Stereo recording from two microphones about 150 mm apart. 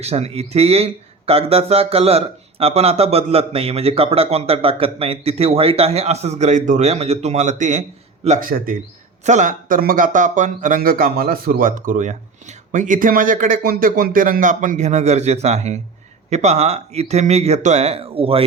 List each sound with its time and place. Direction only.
0.0 s speech: 45° right (ahead or behind)
8.4 s speech: 70° right (ahead or behind)
9.2 s speech: 55° right (ahead or behind); by 18.4 s 40° right (ahead or behind)